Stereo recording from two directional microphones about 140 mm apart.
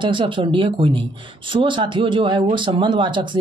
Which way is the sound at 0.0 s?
35° right (ahead or behind).